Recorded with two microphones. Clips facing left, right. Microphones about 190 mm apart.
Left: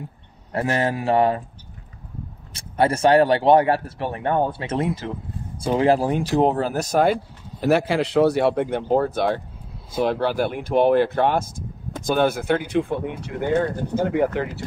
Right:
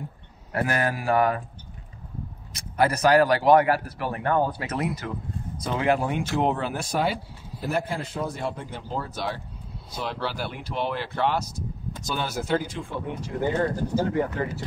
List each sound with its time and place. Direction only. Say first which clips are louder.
0.5 s speech: left 3 dB; 25° left (ahead or behind)
2.5 s speech: left 3 dB; 30° left (ahead or behind); by 7.2 s 45° left (ahead or behind)
7.6 s speech: left 9 dB; 75° left (ahead or behind)